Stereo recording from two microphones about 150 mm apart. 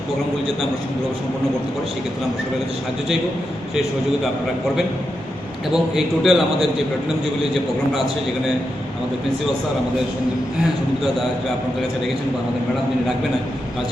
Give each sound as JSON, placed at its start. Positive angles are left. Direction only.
{"t": 5.7, "sound": "a man's voice", "side_deg": 0}